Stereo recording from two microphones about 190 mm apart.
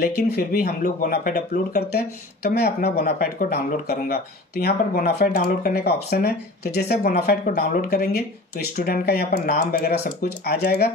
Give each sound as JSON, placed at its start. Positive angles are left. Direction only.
{"t": 0.0, "sound": "speech", "side_deg": 50}